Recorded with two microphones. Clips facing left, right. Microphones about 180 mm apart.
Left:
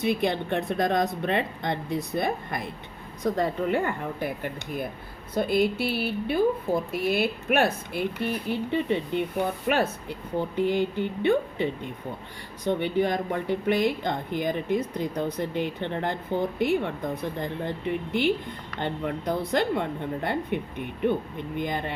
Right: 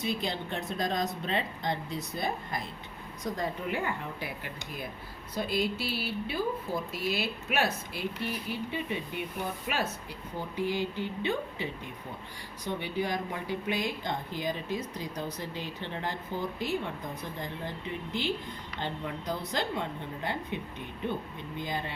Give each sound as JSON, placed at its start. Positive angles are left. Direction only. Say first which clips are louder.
{"t": 0.0, "sound": "speech", "louder": "left 8 dB", "side_deg": 60}